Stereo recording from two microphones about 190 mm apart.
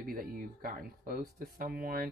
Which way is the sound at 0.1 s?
50° right (ahead or behind).